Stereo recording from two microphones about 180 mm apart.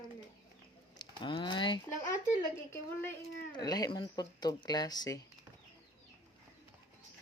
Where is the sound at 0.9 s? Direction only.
25° left (ahead or behind).